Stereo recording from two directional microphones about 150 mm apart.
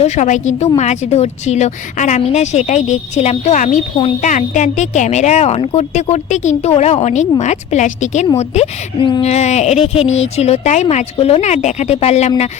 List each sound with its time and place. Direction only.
0.0 s a woman's voice: 55° left (ahead or behind)